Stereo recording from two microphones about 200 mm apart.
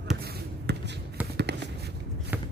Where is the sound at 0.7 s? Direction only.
60° right (ahead or behind).